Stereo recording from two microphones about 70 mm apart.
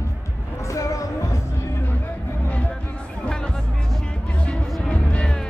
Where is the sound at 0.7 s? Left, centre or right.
Left.